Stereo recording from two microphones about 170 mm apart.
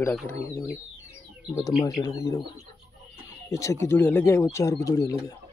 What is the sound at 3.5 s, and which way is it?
Speech, 15° left (ahead or behind).